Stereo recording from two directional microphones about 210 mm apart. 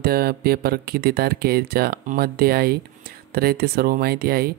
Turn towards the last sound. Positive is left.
turn(degrees=-45)  # may be behind; listen again after turning